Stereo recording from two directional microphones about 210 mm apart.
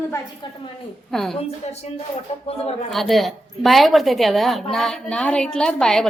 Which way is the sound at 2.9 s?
Centre (ahead or behind).